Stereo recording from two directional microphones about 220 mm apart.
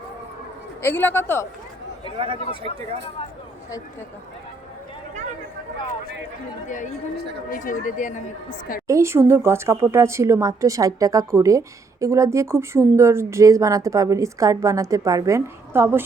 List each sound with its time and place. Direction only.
0.8 s a woman's voice: 10° left (ahead or behind)
2.1 s speech: 25° right (ahead or behind)
7.5 s speech: 40° left (ahead or behind)
8.9 s speech: 10° right (ahead or behind)